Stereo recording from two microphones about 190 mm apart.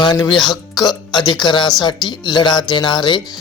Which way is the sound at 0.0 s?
20° left (ahead or behind).